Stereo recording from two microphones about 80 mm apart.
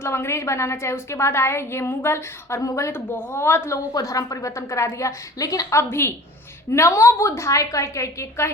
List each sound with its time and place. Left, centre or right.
0.0 s a woman's voice: left
3.9 s a woman's voice: left
5.9 s a woman's voice: left